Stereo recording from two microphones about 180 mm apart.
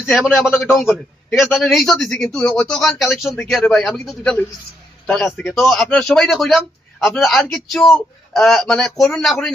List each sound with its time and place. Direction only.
0.0 s a man's voice: centre (ahead or behind)